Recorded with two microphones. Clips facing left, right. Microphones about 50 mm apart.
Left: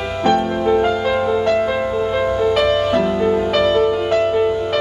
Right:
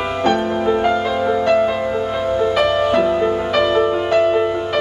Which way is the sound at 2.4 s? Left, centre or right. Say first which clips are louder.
Right 1 dB; centre.